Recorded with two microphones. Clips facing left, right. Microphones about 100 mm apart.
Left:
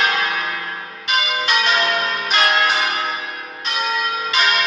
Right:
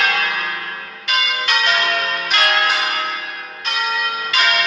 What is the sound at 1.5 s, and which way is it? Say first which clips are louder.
Change ringing: even; 20° left (ahead or behind).